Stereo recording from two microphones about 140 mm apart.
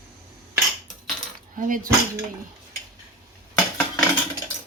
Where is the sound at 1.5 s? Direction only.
70° right (ahead or behind).